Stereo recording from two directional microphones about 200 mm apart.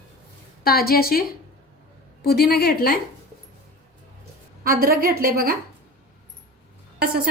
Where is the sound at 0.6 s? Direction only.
50° left (ahead or behind).